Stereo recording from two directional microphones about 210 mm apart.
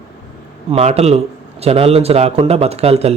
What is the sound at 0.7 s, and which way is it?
Speech, 30° right (ahead or behind).